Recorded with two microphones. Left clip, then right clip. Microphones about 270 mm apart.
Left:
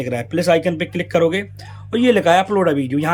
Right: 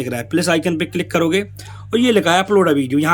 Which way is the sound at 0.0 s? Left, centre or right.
Centre.